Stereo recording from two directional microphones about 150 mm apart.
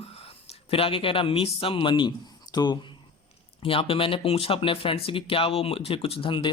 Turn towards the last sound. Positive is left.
turn(degrees=35)  # may be behind; listen again after turning